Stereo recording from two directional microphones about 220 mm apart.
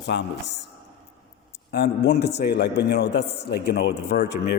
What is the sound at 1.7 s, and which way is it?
A man's voice, 45° left (ahead or behind).